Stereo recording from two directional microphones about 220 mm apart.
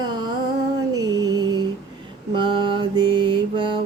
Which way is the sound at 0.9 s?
15° right (ahead or behind).